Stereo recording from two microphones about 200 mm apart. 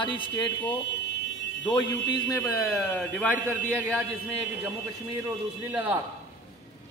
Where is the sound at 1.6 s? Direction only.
20° left (ahead or behind).